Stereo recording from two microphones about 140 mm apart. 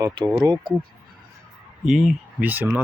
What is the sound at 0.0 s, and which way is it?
Speech, 30° right (ahead or behind).